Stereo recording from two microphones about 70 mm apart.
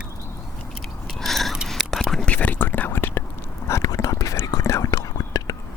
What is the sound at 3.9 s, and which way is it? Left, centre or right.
Whispering, left.